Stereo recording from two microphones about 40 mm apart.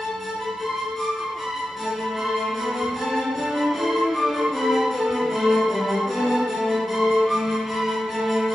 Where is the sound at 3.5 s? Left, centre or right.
Centre.